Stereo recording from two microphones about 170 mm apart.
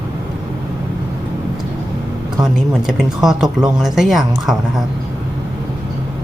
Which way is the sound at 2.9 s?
Centre (ahead or behind).